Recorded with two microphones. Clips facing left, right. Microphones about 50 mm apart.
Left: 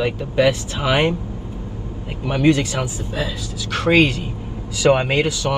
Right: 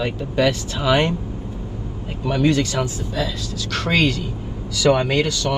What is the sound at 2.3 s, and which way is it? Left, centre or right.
Speech, left.